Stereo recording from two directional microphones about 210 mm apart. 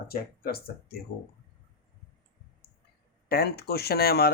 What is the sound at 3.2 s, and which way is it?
Speech, 50° left (ahead or behind).